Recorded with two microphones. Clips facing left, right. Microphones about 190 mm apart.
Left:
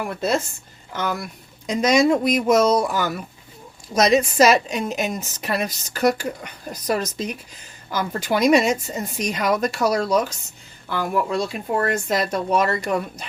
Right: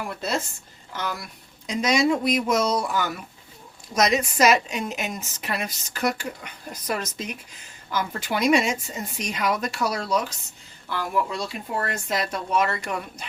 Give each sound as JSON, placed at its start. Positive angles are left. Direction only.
{"t": 0.9, "sound": "speech", "side_deg": 50}
{"t": 3.9, "sound": "a woman's voice", "side_deg": 30}